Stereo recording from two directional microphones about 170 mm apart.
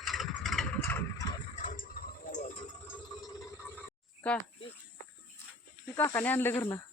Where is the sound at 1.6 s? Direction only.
55° left (ahead or behind).